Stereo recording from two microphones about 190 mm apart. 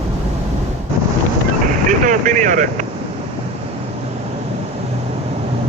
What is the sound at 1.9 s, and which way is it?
Speech, 45° right (ahead or behind).